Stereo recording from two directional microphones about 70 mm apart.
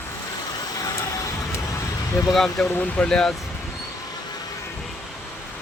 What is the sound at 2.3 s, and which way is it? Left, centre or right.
Speech, centre.